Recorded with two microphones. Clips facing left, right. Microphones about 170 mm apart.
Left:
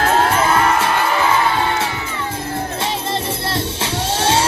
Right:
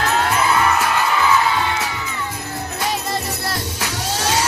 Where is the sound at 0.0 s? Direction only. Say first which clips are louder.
Left 4 dB; 50° left (ahead or behind).